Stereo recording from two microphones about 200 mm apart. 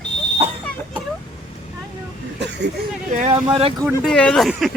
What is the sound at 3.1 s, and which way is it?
Speech, 40° right (ahead or behind).